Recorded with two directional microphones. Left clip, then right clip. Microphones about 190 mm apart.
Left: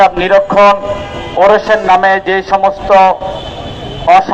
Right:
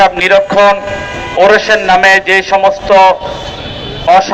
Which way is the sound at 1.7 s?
20° left (ahead or behind).